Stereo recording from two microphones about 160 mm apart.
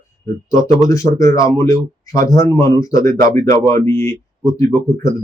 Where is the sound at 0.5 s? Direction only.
20° left (ahead or behind).